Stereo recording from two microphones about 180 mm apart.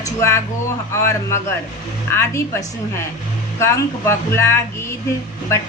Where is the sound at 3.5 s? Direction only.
15° left (ahead or behind).